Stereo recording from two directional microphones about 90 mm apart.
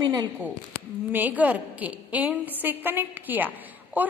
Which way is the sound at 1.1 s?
20° right (ahead or behind).